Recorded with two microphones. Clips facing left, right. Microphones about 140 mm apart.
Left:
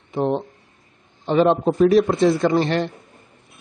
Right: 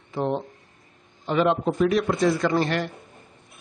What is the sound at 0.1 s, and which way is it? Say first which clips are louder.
Speech: left 4 dB; 20° left (ahead or behind).